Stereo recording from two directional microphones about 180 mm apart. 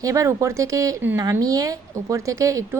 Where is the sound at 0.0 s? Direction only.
15° right (ahead or behind).